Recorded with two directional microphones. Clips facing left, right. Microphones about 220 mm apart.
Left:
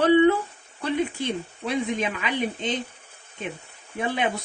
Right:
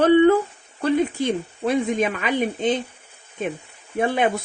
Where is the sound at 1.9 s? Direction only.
50° right (ahead or behind).